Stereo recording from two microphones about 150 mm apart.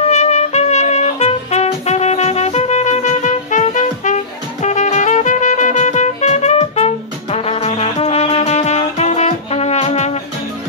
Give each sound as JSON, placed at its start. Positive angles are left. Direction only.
{"t": 0.1, "sound": "music", "side_deg": 50}